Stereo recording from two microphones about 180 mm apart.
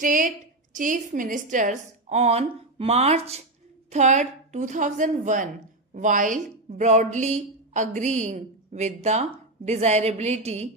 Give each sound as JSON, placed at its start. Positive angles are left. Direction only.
{"t": 0.0, "sound": "a woman's voice", "side_deg": -45}